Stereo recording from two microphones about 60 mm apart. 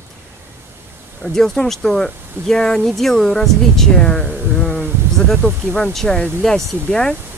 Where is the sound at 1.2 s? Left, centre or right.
Centre.